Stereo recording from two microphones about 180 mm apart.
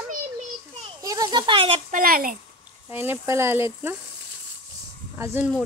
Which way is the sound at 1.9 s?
50° right (ahead or behind).